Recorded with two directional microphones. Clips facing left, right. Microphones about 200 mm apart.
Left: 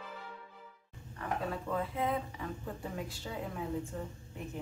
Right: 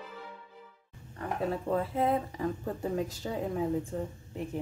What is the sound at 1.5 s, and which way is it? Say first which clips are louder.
Speech: right 5 dB; 35° right (ahead or behind).